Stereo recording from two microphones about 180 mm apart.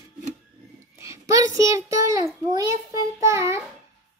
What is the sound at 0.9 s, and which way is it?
A child's voice, 15° right (ahead or behind).